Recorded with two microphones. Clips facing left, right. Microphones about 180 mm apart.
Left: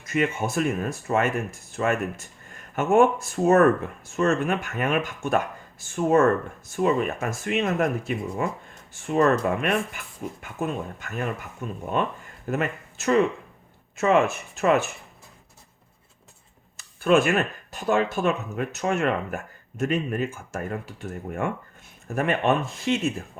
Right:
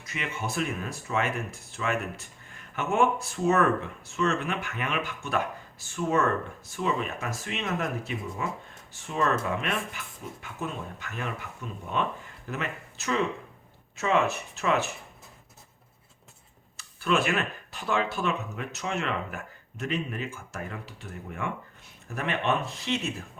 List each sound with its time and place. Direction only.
0.0 s speech: 50° left (ahead or behind)
16.7 s speech: 50° left (ahead or behind)